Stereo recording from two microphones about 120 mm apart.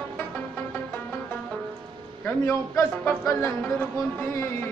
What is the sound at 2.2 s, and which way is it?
A man's voice, 20° left (ahead or behind).